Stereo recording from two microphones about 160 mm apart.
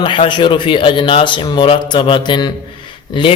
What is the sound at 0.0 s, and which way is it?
Mantra, 30° left (ahead or behind).